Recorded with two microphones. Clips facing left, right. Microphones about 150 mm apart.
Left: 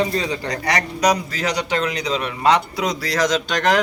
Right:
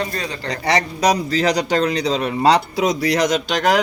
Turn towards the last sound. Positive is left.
turn(degrees=-5)  # may be behind; listen again after turning